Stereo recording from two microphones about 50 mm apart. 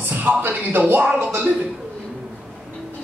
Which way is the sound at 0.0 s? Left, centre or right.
Right.